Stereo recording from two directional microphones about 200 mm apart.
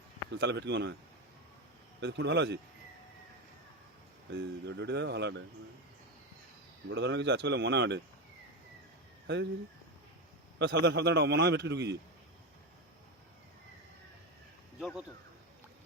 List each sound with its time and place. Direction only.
0.3 s a man's voice: 60° right (ahead or behind)
2.0 s a man's voice: 60° right (ahead or behind)
4.3 s a man's voice: 55° right (ahead or behind)
6.9 s a man's voice: 60° right (ahead or behind)
9.2 s speech: 60° right (ahead or behind)
10.6 s a man's voice: 60° right (ahead or behind)
14.8 s speech: centre (ahead or behind)